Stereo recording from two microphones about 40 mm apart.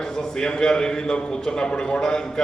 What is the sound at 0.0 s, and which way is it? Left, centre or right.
A man's voice, centre.